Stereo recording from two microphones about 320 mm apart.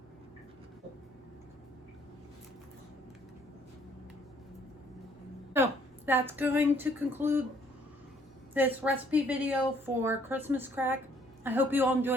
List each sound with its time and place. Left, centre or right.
6.1 s speech: centre
8.5 s a woman's voice: centre